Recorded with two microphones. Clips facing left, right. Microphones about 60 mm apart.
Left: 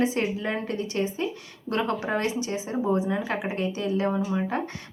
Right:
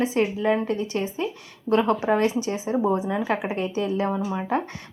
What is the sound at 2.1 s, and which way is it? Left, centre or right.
A woman's voice, right.